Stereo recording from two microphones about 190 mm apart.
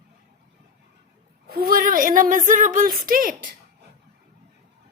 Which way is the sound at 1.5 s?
50° right (ahead or behind).